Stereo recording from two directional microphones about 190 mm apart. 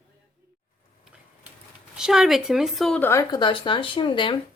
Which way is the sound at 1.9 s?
5° right (ahead or behind).